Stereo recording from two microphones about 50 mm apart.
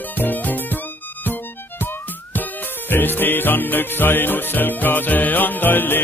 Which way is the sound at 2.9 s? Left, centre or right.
Left.